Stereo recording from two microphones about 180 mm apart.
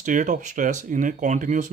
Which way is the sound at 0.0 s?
45° right (ahead or behind).